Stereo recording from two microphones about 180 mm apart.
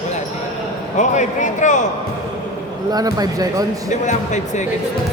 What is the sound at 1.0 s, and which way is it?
Speech, 45° left (ahead or behind).